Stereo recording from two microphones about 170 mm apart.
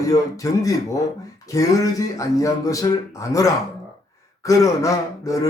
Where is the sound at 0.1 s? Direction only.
20° left (ahead or behind).